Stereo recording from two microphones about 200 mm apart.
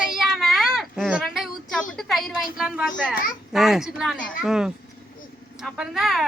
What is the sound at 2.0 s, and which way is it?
A woman's voice, centre (ahead or behind).